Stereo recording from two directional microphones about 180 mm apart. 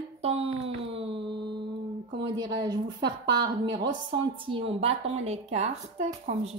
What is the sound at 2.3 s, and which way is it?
A woman's voice, 25° right (ahead or behind).